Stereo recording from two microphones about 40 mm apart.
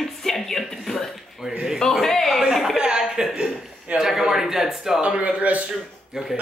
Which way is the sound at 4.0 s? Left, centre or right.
Centre.